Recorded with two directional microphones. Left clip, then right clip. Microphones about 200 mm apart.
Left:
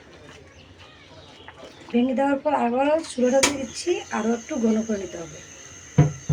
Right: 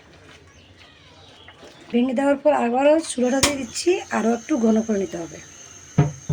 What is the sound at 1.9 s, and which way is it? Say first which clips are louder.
Speech: right 2 dB; 45° right (ahead or behind).